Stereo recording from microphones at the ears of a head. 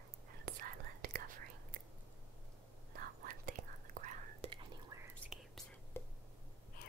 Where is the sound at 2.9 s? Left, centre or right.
Right.